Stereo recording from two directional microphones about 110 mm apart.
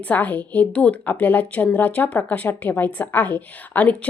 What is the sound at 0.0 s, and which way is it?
A woman's voice, 15° left (ahead or behind).